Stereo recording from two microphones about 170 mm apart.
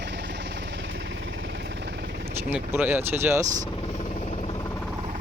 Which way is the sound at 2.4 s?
10° right (ahead or behind).